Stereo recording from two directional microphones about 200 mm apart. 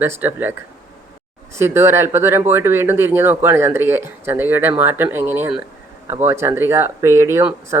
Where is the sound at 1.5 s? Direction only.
10° right (ahead or behind).